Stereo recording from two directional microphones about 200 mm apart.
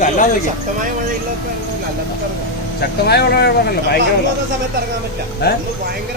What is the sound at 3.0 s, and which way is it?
Speech, 55° left (ahead or behind).